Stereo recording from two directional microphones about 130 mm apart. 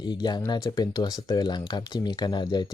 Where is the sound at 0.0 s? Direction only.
35° left (ahead or behind).